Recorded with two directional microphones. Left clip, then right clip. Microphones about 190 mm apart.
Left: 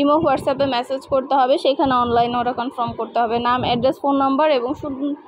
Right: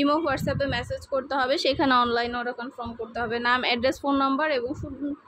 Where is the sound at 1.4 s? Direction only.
5° right (ahead or behind).